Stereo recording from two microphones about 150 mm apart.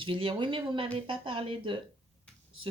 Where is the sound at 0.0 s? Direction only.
35° right (ahead or behind).